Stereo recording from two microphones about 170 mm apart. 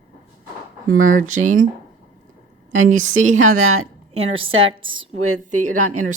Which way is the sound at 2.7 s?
45° right (ahead or behind).